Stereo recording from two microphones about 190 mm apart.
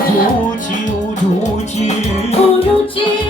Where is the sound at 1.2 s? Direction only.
35° left (ahead or behind).